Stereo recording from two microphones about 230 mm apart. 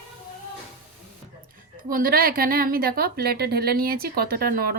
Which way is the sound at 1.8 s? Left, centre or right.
Right.